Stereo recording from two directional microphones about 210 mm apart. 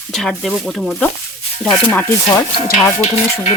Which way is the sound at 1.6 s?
5° left (ahead or behind).